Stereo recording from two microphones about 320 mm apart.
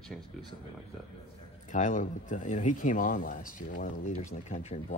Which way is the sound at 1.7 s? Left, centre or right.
Left.